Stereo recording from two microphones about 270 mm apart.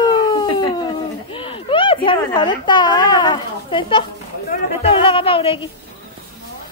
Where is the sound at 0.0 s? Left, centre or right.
Centre.